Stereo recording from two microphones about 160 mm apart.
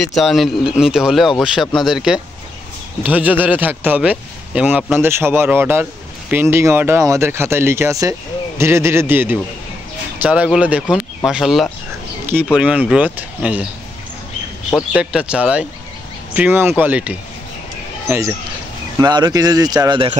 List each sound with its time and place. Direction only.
0.0 s speech: centre (ahead or behind)
14.7 s speech: 5° left (ahead or behind); by 18.3 s 15° right (ahead or behind)
18.9 s speech: 25° right (ahead or behind)